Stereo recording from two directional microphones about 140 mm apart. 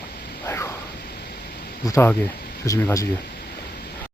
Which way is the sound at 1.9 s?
15° left (ahead or behind).